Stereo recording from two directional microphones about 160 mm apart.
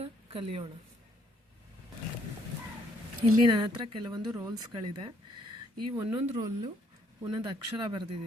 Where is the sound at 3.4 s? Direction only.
30° right (ahead or behind).